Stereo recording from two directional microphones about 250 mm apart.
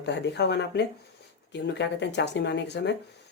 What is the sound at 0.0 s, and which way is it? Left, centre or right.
Speech, left.